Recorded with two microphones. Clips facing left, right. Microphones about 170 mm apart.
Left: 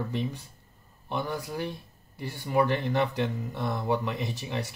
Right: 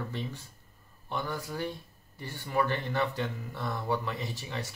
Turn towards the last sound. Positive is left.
turn(degrees=15)  # may be behind; listen again after turning